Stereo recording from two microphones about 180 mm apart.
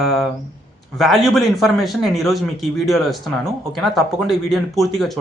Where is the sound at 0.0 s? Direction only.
Centre (ahead or behind).